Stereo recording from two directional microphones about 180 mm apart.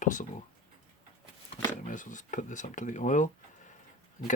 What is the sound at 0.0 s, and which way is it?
Speech, 45° left (ahead or behind).